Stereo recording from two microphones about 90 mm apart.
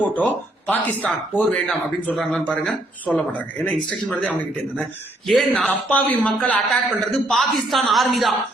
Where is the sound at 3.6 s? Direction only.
15° left (ahead or behind).